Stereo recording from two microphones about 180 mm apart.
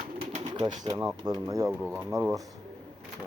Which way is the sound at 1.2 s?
20° right (ahead or behind).